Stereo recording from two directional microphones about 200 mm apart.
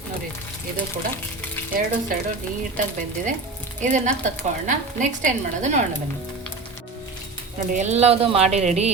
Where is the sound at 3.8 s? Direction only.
40° right (ahead or behind).